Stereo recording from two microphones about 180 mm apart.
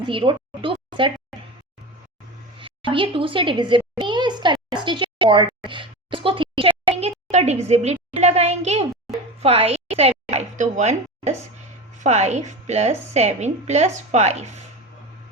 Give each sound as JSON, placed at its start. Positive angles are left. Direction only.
{"t": 0.1, "sound": "a woman's voice", "side_deg": -30}
{"t": 2.6, "sound": "a sound", "side_deg": -30}
{"t": 4.7, "sound": "a woman's voice", "side_deg": -25}